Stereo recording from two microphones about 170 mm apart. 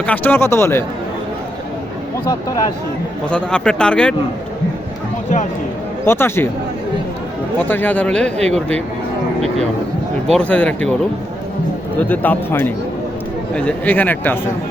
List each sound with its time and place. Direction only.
0.0 s speech: 10° left (ahead or behind)
2.2 s speech: 25° left (ahead or behind)
3.2 s speech: 5° left (ahead or behind)
6.1 s speech: 15° left (ahead or behind)
7.7 s speech: 10° left (ahead or behind)
10.3 s speech: 10° left (ahead or behind)
12.0 s speech: 10° left (ahead or behind)